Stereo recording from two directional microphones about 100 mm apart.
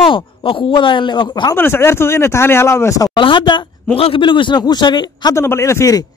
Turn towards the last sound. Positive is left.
turn(degrees=30)  # may be behind; listen again after turning